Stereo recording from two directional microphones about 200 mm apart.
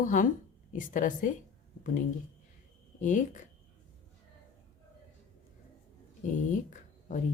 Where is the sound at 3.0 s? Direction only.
40° left (ahead or behind).